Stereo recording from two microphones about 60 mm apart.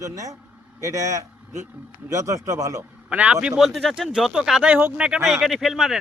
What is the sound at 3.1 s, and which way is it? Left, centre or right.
Speech, right.